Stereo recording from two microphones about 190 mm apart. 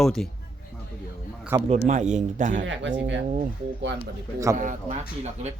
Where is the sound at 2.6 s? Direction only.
75° right (ahead or behind).